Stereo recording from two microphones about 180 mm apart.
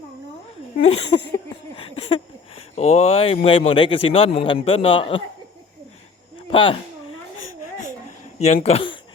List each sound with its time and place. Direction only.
0.8 s speech: 35° left (ahead or behind)
6.5 s speech: 30° left (ahead or behind)
8.6 s speech: 30° left (ahead or behind)